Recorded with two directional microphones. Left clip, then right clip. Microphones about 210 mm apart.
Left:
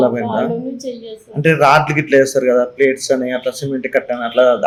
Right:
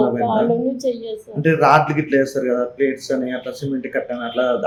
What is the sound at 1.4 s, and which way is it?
Speech, 40° left (ahead or behind).